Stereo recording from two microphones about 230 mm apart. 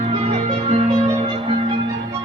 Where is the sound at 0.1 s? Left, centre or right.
Right.